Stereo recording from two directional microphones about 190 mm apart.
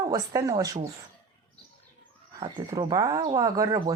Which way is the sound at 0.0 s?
20° right (ahead or behind).